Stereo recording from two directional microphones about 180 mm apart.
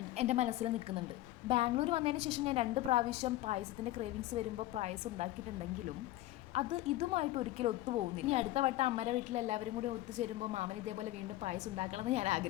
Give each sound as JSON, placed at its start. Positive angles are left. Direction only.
{"t": 0.2, "sound": "a woman's voice", "side_deg": -40}
{"t": 6.5, "sound": "a woman's voice", "side_deg": -35}